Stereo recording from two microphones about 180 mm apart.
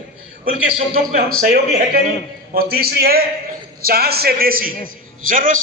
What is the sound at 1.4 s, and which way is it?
A man's voice, 55° right (ahead or behind).